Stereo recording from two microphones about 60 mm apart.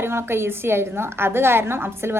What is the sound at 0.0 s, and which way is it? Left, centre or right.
A woman's voice, right.